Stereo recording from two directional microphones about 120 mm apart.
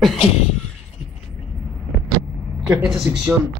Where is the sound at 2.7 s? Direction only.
5° right (ahead or behind).